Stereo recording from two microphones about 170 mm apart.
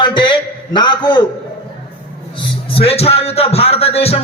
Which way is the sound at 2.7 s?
35° left (ahead or behind).